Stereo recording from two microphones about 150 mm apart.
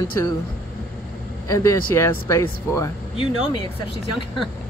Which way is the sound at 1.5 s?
20° left (ahead or behind).